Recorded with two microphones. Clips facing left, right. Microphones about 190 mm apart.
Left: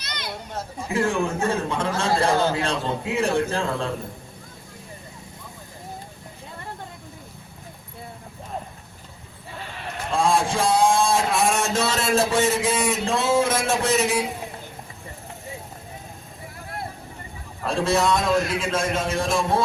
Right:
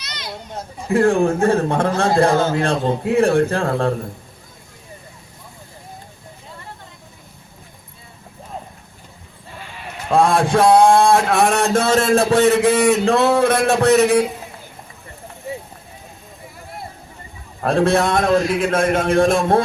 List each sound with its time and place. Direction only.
0.0 s children playing: 55° left (ahead or behind)
0.9 s a man's voice: 55° right (ahead or behind)
10.1 s a man's voice: 60° right (ahead or behind)
17.6 s a man's voice: 60° right (ahead or behind)